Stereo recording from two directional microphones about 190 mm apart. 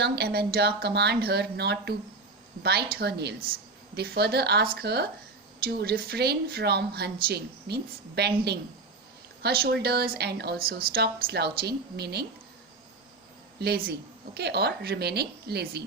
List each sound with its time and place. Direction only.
0.0 s a woman's voice: 55° right (ahead or behind)
13.6 s a woman's voice: 55° right (ahead or behind)